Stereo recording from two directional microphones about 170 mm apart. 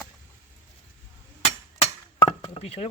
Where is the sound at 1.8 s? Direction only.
30° left (ahead or behind).